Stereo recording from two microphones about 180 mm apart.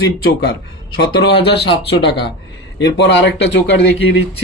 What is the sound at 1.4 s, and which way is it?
Speech, 65° left (ahead or behind).